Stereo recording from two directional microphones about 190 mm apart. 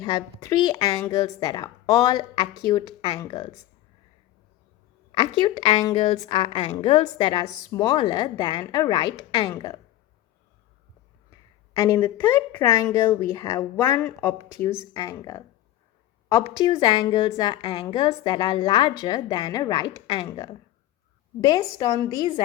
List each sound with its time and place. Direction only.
0.0 s a woman's voice: 25° left (ahead or behind)
5.4 s a woman's voice: 25° left (ahead or behind)
11.7 s a woman's voice: 15° left (ahead or behind)